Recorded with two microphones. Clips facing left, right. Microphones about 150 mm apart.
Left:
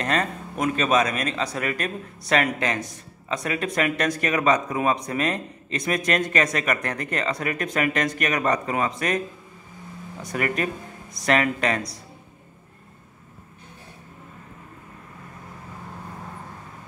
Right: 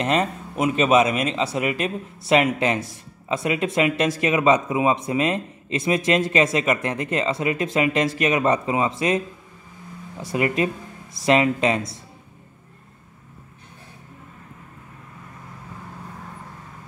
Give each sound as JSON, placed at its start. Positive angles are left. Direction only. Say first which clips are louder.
{"t": 0.0, "sound": "a man's voice", "louder": "right 3 dB", "side_deg": -20}
{"t": 0.6, "sound": "a man's voice", "louder": "right 4 dB", "side_deg": -10}
{"t": 1.1, "sound": "a man's voice", "louder": "right 4 dB", "side_deg": -25}
{"t": 10.3, "sound": "a man's voice", "louder": "right 4 dB", "side_deg": -20}